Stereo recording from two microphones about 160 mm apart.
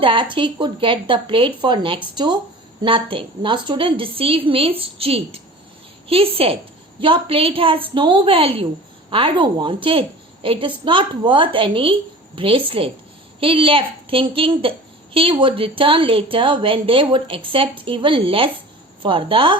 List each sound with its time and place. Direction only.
0.0 s a woman's voice: 30° right (ahead or behind)